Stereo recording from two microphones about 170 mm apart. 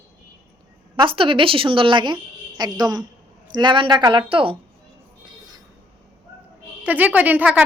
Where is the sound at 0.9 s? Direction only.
30° right (ahead or behind).